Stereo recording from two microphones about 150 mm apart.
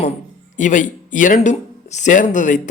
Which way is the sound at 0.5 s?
55° left (ahead or behind).